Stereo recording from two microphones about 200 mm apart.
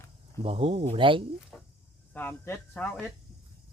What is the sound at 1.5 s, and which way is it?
Speech, 5° left (ahead or behind).